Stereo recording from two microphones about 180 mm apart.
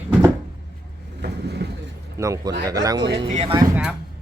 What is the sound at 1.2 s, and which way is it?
Vehicle, 65° right (ahead or behind).